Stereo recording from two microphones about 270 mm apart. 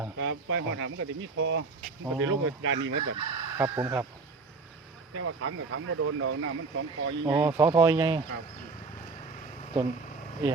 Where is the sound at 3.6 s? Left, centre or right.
Centre.